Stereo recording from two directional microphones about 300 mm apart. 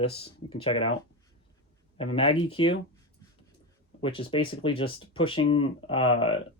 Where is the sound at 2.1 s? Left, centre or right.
Centre.